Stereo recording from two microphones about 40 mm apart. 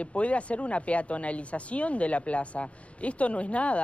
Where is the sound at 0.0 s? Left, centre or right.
Left.